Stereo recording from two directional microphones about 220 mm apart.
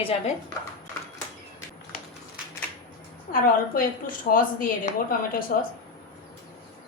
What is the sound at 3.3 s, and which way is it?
A woman's voice, 40° left (ahead or behind).